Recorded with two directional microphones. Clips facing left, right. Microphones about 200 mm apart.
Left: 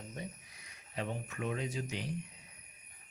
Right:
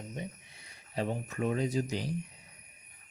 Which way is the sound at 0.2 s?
30° right (ahead or behind).